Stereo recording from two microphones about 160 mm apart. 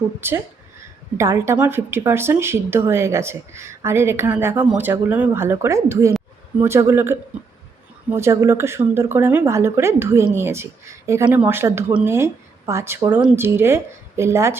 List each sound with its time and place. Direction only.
0.2 s speech: 15° right (ahead or behind)